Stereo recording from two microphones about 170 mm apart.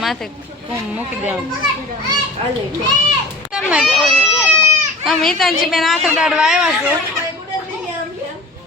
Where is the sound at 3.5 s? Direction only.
5° right (ahead or behind).